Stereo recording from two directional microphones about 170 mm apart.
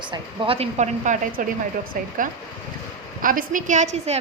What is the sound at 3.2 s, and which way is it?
Speech, 55° right (ahead or behind).